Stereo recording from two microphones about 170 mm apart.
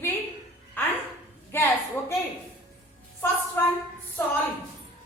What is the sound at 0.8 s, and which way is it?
Speech, 10° left (ahead or behind).